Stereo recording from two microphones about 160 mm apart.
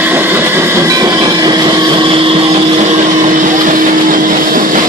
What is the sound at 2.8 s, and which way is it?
Vehicle, 50° right (ahead or behind).